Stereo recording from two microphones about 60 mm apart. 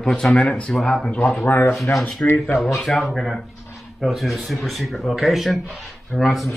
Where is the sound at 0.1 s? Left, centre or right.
Centre.